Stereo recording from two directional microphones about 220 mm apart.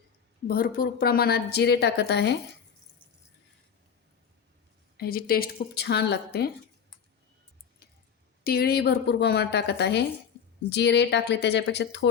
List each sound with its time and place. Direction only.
0.4 s a woman's voice: 40° left (ahead or behind)
4.9 s a woman's voice: 45° left (ahead or behind)
8.4 s a woman's voice: 45° left (ahead or behind)